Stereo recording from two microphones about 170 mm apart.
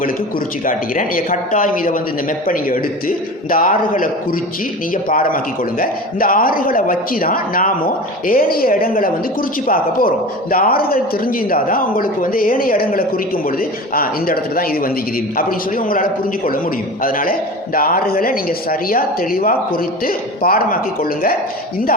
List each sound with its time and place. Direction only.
0.6 s a man's voice: 55° left (ahead or behind)